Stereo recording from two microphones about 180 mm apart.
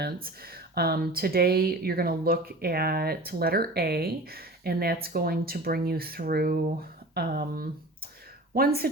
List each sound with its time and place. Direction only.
0.5 s speech: 60° right (ahead or behind)